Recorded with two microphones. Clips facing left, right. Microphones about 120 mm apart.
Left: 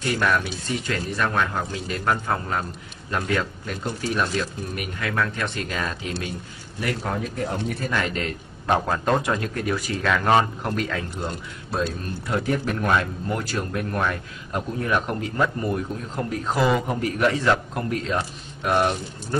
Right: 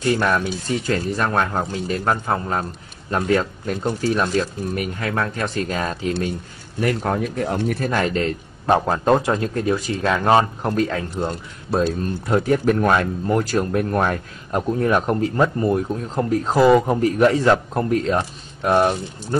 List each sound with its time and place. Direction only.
0.0 s speech: 35° right (ahead or behind)
6.8 s speech: 50° right (ahead or behind)
7.9 s a man's voice: 35° right (ahead or behind)
18.1 s speech: 30° right (ahead or behind)